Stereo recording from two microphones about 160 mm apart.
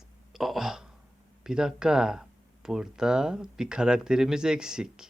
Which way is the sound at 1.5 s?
5° right (ahead or behind).